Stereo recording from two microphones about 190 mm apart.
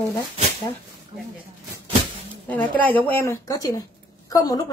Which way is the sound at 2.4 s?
10° left (ahead or behind).